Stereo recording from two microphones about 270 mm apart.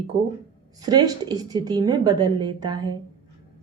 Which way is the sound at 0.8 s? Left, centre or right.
Centre.